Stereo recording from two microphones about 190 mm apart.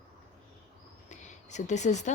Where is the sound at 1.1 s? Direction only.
40° left (ahead or behind).